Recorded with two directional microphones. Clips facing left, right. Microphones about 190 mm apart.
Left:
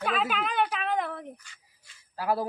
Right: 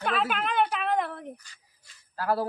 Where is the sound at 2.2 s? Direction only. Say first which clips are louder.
Right 1 dB; 10° left (ahead or behind).